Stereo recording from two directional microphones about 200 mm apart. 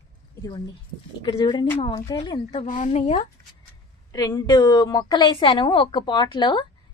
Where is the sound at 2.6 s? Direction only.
40° left (ahead or behind).